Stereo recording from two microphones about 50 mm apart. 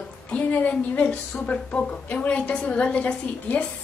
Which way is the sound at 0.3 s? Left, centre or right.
Left.